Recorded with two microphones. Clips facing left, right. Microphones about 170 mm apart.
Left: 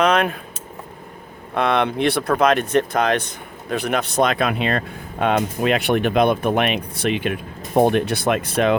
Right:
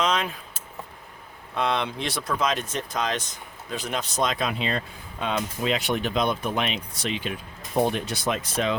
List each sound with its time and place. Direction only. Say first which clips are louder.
0.0 s keys jangling: left 8 dB; 60° left (ahead or behind)
1.5 s speech: left 7 dB; 60° left (ahead or behind)